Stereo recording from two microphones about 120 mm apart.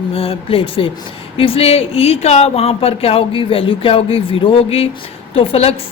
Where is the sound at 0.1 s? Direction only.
50° left (ahead or behind).